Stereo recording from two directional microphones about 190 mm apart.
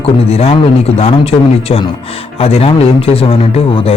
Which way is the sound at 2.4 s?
30° left (ahead or behind).